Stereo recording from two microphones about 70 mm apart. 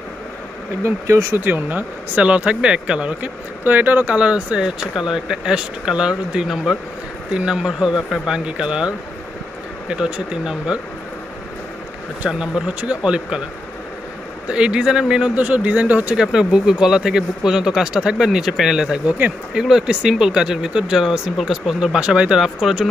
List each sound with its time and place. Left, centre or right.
0.8 s speech: right
1.4 s speech: right
12.2 s speech: centre
14.5 s speech: centre
16.2 s speech: centre